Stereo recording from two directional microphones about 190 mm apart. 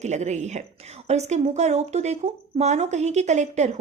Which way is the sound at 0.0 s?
35° right (ahead or behind).